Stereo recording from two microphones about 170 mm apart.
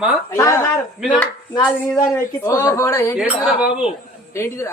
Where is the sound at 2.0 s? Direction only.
20° left (ahead or behind).